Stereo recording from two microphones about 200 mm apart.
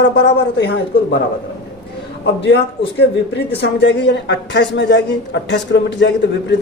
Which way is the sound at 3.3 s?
60° left (ahead or behind).